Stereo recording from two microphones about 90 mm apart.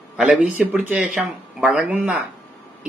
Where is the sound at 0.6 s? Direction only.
15° right (ahead or behind).